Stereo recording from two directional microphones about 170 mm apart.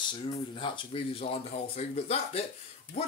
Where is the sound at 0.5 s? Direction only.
30° left (ahead or behind).